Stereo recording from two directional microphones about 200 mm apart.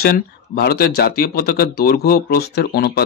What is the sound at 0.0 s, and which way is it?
Speech, 50° left (ahead or behind).